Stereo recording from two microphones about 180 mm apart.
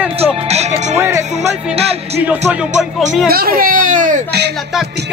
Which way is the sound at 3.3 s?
55° right (ahead or behind).